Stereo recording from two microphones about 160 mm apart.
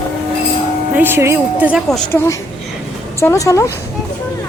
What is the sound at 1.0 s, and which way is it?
Speech, 15° right (ahead or behind).